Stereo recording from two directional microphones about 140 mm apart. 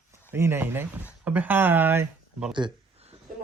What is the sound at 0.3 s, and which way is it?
Speech, 20° right (ahead or behind).